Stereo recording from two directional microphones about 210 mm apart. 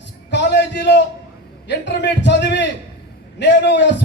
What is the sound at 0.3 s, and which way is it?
A man's voice, 55° left (ahead or behind).